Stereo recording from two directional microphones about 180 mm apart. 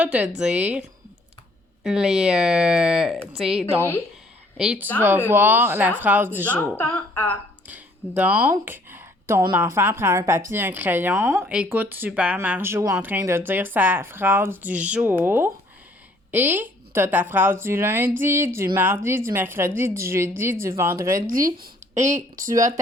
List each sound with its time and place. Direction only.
0.0 s speech: 5° right (ahead or behind)
6.6 s a woman's voice: 15° left (ahead or behind)
7.7 s speech: 10° right (ahead or behind)
21.3 s speech: 50° right (ahead or behind)
22.5 s speech: 20° right (ahead or behind)